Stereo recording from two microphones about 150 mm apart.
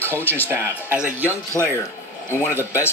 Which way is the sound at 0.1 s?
15° left (ahead or behind).